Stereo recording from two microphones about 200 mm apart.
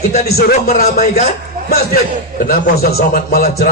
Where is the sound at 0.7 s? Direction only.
45° left (ahead or behind).